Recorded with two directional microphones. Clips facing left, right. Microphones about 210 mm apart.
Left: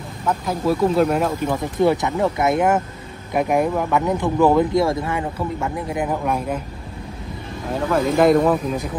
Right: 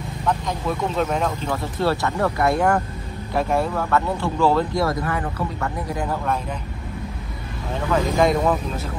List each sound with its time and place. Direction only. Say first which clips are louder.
0.3 s speech: left 4 dB; 5° left (ahead or behind)
7.9 s speech: left 4 dB; 5° left (ahead or behind)